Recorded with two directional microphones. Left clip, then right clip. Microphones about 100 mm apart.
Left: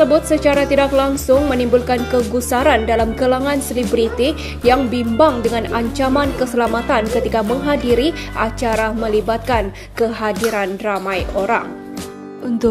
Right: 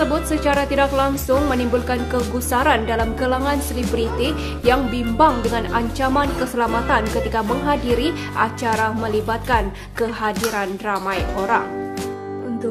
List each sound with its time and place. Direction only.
0.0 s speech: 30° left (ahead or behind)